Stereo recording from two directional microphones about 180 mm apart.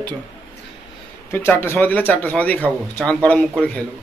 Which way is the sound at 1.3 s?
15° left (ahead or behind).